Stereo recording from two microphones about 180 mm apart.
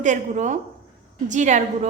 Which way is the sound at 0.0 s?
45° right (ahead or behind).